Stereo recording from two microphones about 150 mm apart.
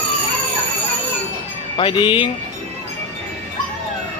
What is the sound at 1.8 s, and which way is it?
Speech, 35° left (ahead or behind).